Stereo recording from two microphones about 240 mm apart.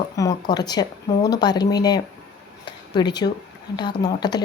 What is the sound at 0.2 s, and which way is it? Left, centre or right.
Speech, centre.